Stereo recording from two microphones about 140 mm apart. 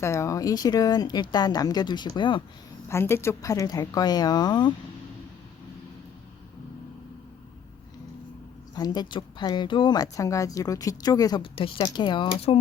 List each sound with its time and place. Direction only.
0.0 s a woman's voice: 20° left (ahead or behind)
2.9 s a woman's voice: 20° left (ahead or behind)
8.7 s a woman's voice: 30° left (ahead or behind)
11.5 s speech: 40° left (ahead or behind)